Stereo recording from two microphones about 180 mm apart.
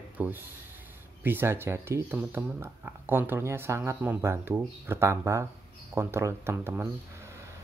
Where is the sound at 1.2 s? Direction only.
10° right (ahead or behind).